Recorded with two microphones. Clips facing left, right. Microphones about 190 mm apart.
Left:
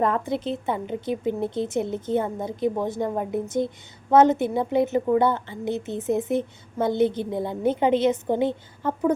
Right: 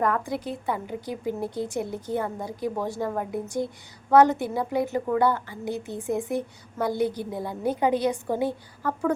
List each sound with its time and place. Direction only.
0.0 s a woman's voice: 25° left (ahead or behind)